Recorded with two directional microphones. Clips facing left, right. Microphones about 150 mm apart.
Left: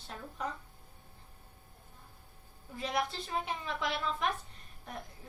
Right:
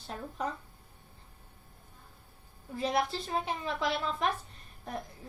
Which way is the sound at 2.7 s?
35° right (ahead or behind).